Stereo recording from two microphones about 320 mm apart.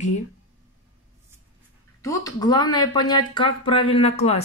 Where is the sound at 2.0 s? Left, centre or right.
Centre.